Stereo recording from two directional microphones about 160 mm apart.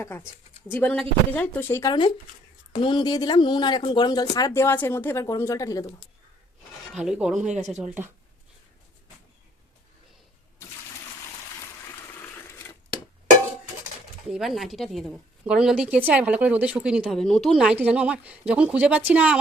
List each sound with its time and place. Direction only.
0.7 s speech: 10° left (ahead or behind)
6.9 s a woman's voice: 5° right (ahead or behind)
14.3 s a woman's voice: 5° right (ahead or behind)